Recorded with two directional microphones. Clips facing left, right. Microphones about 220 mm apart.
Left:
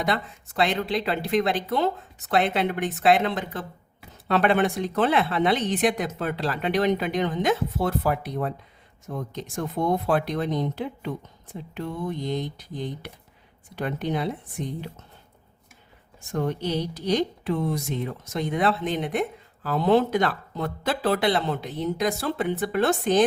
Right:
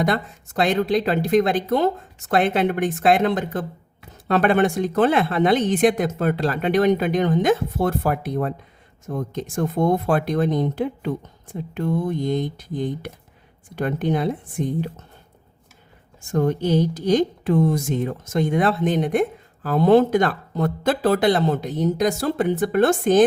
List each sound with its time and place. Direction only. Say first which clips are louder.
0.0 s speech: right 5 dB; 45° right (ahead or behind)
16.2 s speech: right 6 dB; 45° right (ahead or behind)